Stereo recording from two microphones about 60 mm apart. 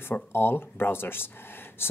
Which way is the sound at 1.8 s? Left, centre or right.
Left.